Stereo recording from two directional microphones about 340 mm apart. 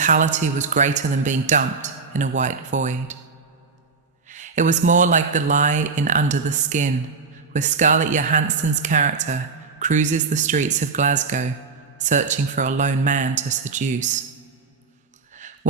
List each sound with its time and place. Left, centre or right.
0.0 s a woman's voice: right
4.3 s a woman's voice: right